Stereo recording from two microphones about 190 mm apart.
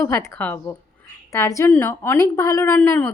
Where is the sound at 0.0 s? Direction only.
15° left (ahead or behind).